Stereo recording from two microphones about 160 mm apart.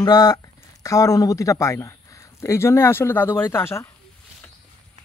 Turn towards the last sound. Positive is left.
turn(degrees=15)  # may be behind; listen again after turning